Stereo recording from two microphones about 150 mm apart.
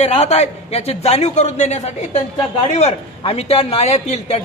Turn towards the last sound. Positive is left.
turn(degrees=45)  # may be behind; listen again after turning